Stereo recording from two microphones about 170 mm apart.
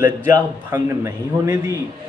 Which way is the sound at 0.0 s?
10° right (ahead or behind).